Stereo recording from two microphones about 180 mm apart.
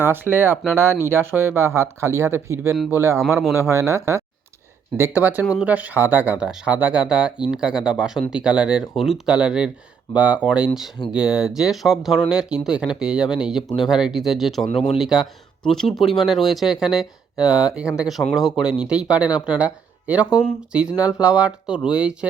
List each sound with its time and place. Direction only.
0.0 s speech: 10° right (ahead or behind)